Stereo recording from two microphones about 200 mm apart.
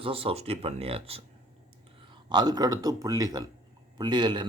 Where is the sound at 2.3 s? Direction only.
20° right (ahead or behind).